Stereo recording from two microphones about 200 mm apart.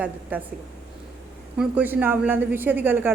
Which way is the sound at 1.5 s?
10° right (ahead or behind).